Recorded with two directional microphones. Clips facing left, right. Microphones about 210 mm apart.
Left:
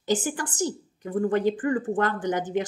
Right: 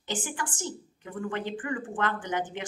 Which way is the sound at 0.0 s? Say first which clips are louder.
Left 8 dB; 40° left (ahead or behind).